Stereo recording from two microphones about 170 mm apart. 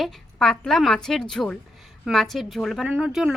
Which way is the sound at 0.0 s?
5° left (ahead or behind).